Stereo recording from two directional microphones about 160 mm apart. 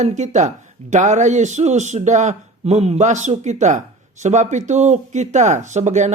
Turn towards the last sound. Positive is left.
turn(degrees=-50)  # may be behind; listen again after turning